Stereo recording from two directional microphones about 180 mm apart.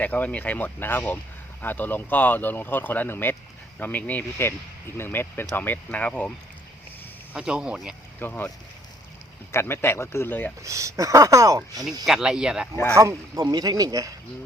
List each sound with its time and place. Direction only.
0.0 s speech: 10° left (ahead or behind)
7.3 s speech: 5° right (ahead or behind)
8.2 s speech: 10° left (ahead or behind)
10.6 s speech: 15° right (ahead or behind)
12.0 s speech: 5° right (ahead or behind)
12.9 s speech: 15° right (ahead or behind)